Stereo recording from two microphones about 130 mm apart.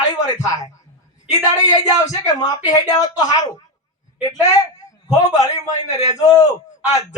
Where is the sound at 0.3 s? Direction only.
30° left (ahead or behind).